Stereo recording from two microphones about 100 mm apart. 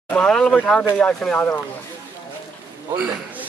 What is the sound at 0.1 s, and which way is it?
Speech, 10° left (ahead or behind).